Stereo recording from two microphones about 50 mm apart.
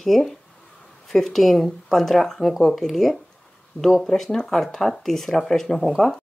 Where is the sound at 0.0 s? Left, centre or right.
Centre.